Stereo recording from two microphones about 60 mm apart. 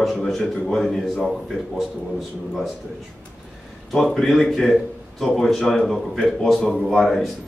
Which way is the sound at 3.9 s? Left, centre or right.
Centre.